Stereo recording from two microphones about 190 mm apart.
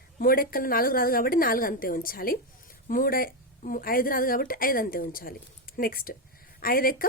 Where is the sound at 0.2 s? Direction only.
50° left (ahead or behind).